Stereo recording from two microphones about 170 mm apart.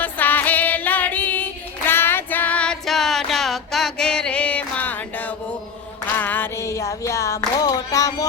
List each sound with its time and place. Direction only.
0.0 s music: 10° left (ahead or behind)
1.9 s female singing: 15° left (ahead or behind)
6.1 s music: 10° left (ahead or behind)